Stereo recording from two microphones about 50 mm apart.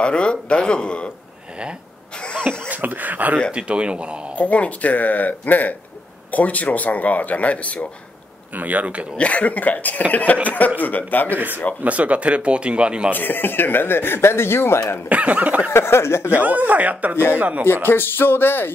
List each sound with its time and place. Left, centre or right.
0.0 s a man's voice: left
2.7 s speech: right
3.5 s speech: right
4.4 s speech: left
8.5 s speech: right
9.1 s a man's voice: left
11.3 s speech: right
13.1 s speech: left
15.0 s speech: right
15.7 s speech: left
16.3 s speech: right
17.8 s speech: left